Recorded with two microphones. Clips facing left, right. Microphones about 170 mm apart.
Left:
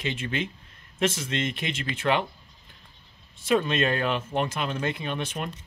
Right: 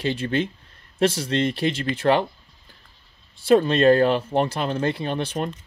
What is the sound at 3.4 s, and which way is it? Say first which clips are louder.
Speech: right 7 dB; 35° right (ahead or behind).